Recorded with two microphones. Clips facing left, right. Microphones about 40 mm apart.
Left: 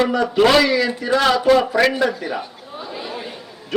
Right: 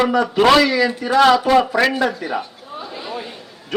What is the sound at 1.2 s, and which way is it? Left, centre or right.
Speech, centre.